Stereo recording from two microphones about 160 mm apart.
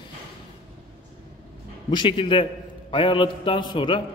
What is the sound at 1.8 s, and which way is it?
A man's voice, 30° left (ahead or behind).